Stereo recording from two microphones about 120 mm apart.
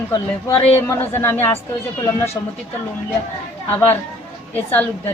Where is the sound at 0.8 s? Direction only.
20° left (ahead or behind).